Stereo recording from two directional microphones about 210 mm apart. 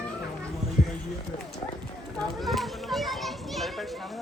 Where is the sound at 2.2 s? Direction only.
Centre (ahead or behind).